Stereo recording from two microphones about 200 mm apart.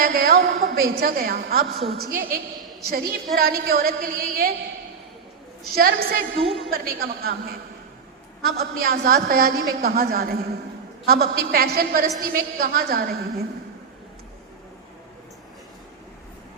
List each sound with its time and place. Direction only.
0.0 s a woman's voice: 50° right (ahead or behind)
5.7 s a woman's voice: 50° right (ahead or behind)